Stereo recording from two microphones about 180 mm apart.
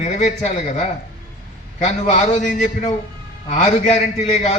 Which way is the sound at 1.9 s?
40° left (ahead or behind).